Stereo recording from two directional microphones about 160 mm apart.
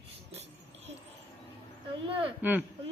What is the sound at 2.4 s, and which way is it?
Speech, 10° right (ahead or behind).